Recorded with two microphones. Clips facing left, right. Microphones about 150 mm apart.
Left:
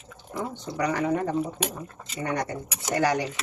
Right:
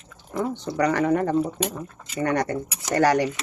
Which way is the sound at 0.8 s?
65° right (ahead or behind).